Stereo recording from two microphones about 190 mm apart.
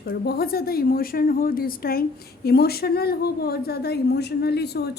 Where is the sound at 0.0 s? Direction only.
55° left (ahead or behind).